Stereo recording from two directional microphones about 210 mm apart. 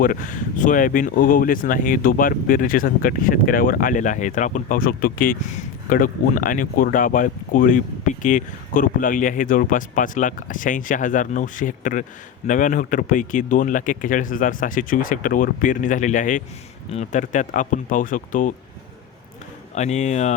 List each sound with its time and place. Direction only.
0.6 s speech: 40° left (ahead or behind)
19.7 s speech: 35° left (ahead or behind)